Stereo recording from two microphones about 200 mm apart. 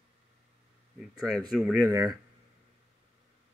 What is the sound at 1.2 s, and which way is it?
Speech, centre (ahead or behind).